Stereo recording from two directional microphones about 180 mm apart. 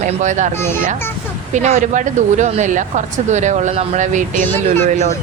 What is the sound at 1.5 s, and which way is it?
Speech, 40° right (ahead or behind).